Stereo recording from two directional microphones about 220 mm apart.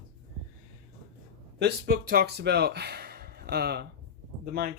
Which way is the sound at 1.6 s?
45° right (ahead or behind).